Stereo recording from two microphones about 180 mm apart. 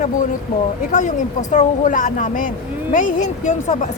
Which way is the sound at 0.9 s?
45° left (ahead or behind).